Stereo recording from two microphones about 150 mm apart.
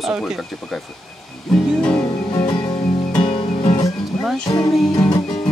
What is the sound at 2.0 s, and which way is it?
Music, 25° left (ahead or behind).